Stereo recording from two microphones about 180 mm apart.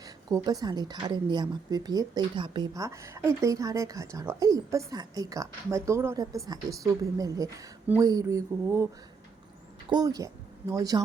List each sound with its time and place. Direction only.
0.0 s speech: 20° right (ahead or behind)
9.9 s speech: 20° right (ahead or behind)